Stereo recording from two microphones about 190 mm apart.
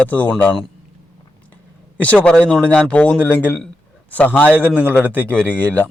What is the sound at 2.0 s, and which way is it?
A man's voice, 5° left (ahead or behind).